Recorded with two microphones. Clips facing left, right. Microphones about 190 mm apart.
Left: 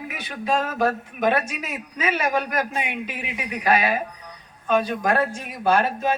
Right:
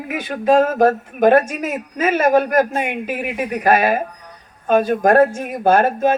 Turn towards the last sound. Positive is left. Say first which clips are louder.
# right 6 dB
turn(degrees=-50)  # may be behind; listen again after turning